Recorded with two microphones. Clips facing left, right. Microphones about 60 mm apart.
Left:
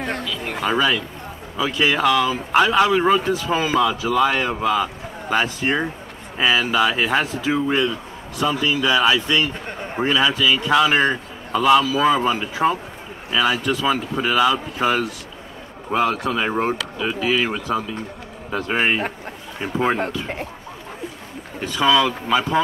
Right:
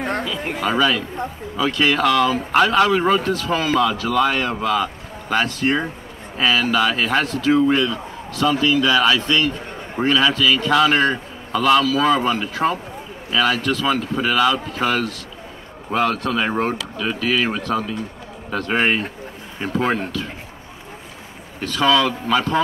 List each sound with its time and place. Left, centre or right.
0.6 s speech: centre
17.7 s speech: centre
21.5 s speech: centre